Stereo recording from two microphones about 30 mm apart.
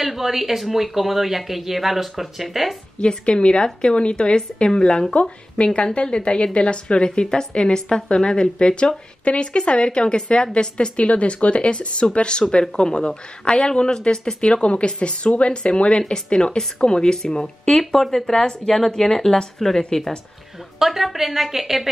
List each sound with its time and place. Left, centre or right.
0.0 s speech: centre
3.0 s a woman's voice: left
7.1 s a woman's voice: left
14.4 s a woman's voice: left
16.3 s speech: left; by 19.7 s centre
20.8 s speech: centre